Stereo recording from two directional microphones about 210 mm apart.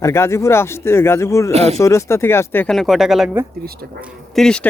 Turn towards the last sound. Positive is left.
turn(degrees=5)  # may be behind; listen again after turning